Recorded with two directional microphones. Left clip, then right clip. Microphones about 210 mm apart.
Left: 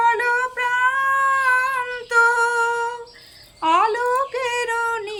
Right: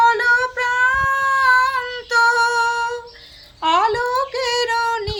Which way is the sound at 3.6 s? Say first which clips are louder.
Right 1 dB; 15° left (ahead or behind).